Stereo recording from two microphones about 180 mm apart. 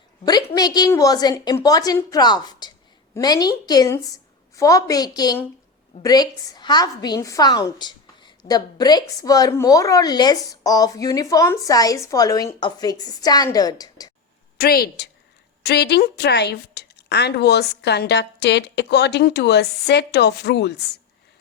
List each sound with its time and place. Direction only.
0.3 s a woman's voice: 20° left (ahead or behind)
14.6 s a woman's voice: 60° left (ahead or behind)